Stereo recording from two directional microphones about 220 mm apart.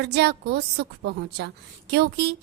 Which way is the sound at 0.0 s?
50° right (ahead or behind).